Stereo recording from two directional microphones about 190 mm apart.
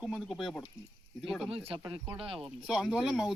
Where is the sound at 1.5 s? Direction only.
30° right (ahead or behind).